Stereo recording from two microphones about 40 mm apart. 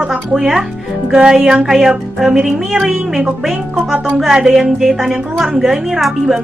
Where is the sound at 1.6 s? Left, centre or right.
Centre.